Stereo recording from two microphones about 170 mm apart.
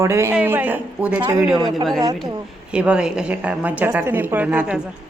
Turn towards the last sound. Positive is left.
turn(degrees=-5)  # may be behind; listen again after turning